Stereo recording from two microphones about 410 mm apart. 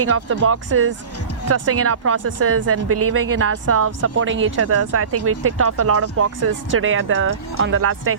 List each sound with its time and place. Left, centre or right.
0.0 s speech: right